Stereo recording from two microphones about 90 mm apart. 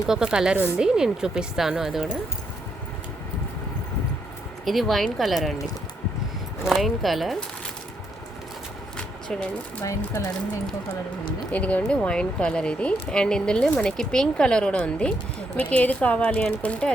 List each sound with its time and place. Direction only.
0.1 s a woman's voice: 10° right (ahead or behind)
4.6 s speech: centre (ahead or behind)
6.7 s speech: centre (ahead or behind)
9.0 s a sound: 10° left (ahead or behind)
11.5 s speech: 15° left (ahead or behind)